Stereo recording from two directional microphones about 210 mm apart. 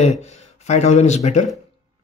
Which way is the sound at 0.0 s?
30° left (ahead or behind).